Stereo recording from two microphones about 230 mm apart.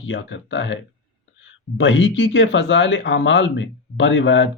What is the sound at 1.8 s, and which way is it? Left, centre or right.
Speech, left.